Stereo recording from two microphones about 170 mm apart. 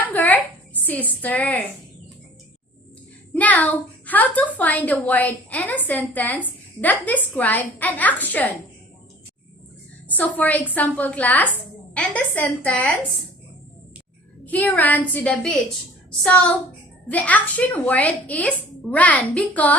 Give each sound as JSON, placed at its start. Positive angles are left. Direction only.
{"t": 0.1, "sound": "a sound", "side_deg": 10}
{"t": 3.3, "sound": "a woman's voice", "side_deg": 10}
{"t": 10.1, "sound": "a woman's voice", "side_deg": 10}
{"t": 14.4, "sound": "a woman's voice", "side_deg": 10}